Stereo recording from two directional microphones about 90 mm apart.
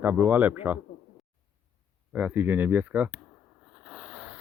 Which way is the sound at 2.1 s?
20° right (ahead or behind).